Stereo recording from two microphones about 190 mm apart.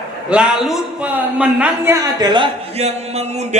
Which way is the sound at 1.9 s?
20° right (ahead or behind).